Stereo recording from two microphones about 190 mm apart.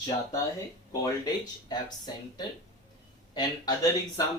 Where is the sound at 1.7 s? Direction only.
20° left (ahead or behind).